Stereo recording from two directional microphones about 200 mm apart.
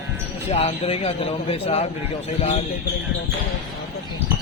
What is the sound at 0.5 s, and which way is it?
A man's voice, 30° left (ahead or behind).